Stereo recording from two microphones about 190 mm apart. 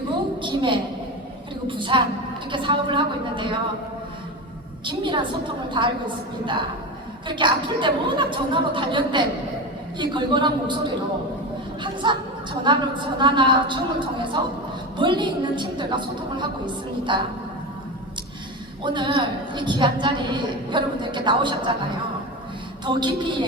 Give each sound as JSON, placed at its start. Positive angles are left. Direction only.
{"t": 0.4, "sound": "a woman's voice", "side_deg": -25}
{"t": 4.9, "sound": "a woman's voice", "side_deg": -25}
{"t": 12.0, "sound": "a woman's voice", "side_deg": -25}
{"t": 14.9, "sound": "a woman's voice", "side_deg": -25}
{"t": 18.8, "sound": "a woman's voice", "side_deg": -25}
{"t": 22.9, "sound": "a woman's voice", "side_deg": -25}